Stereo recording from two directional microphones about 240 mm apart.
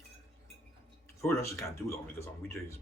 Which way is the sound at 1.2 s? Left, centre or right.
Centre.